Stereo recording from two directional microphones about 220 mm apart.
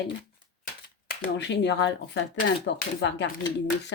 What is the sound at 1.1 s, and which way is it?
Speech, 50° left (ahead or behind).